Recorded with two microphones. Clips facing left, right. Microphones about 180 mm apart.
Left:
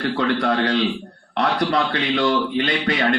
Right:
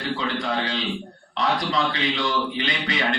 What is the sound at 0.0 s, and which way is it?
A man's voice, 65° left (ahead or behind).